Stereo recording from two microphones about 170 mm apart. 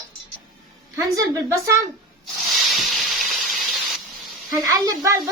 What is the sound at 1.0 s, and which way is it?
Speech, 20° right (ahead or behind).